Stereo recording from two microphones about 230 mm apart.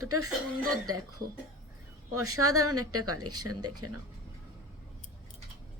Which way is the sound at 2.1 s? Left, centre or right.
Right.